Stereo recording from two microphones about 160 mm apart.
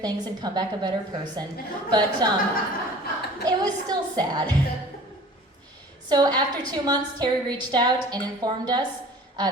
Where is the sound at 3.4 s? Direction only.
25° right (ahead or behind).